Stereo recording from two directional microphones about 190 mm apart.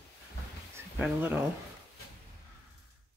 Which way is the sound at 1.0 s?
10° right (ahead or behind).